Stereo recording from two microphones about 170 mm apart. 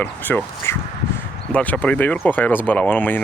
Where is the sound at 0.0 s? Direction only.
10° left (ahead or behind).